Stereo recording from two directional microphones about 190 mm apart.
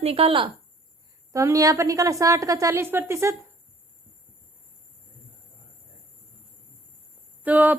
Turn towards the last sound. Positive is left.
turn(degrees=-10)  # may be behind; listen again after turning